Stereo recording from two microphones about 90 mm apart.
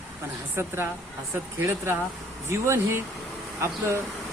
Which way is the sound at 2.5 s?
30° right (ahead or behind).